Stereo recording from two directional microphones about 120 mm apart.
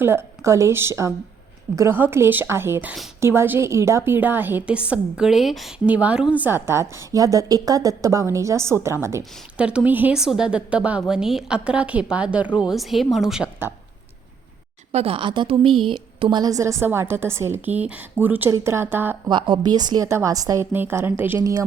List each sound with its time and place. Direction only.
0.0 s a woman's voice: 20° right (ahead or behind); by 5.7 s centre (ahead or behind)
5.8 s a woman's voice: 10° right (ahead or behind)
9.6 s a woman's voice: 10° right (ahead or behind)
14.9 s a woman's voice: 50° right (ahead or behind); by 19.1 s 15° right (ahead or behind)
19.3 s a woman's voice: 40° right (ahead or behind)
20.7 s a woman's voice: 20° right (ahead or behind)